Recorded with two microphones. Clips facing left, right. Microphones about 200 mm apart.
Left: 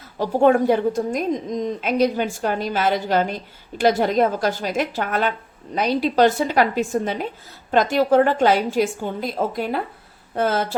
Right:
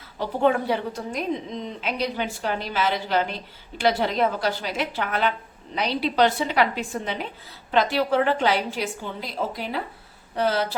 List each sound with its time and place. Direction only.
0.2 s a woman's voice: 50° left (ahead or behind)